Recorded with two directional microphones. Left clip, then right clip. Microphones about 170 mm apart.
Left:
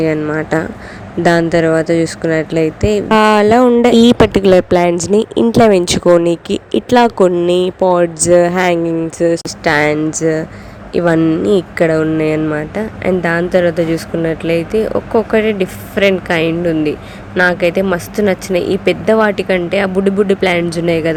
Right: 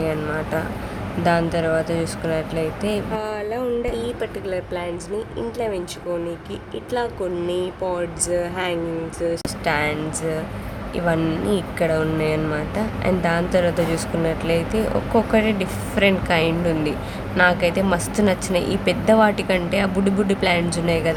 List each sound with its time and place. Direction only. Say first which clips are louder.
0.0 s speech: left 9 dB; 40° left (ahead or behind)
3.2 s speech: left 17 dB; 65° left (ahead or behind); by 21.2 s 35° left (ahead or behind)